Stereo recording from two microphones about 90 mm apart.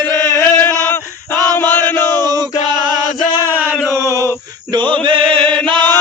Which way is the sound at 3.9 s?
35° right (ahead or behind).